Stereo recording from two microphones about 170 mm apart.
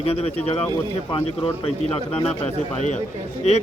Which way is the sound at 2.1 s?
35° left (ahead or behind).